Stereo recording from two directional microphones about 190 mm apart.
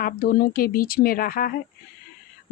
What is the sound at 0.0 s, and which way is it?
Speech, 50° left (ahead or behind).